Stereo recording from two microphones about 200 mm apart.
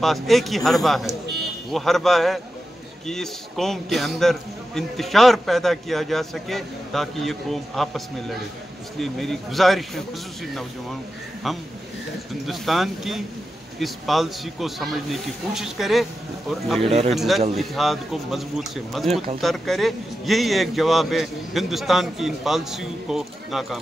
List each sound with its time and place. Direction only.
0.0 s a man's voice: centre (ahead or behind)
16.8 s speech: 30° right (ahead or behind)
17.1 s a man's voice: centre (ahead or behind)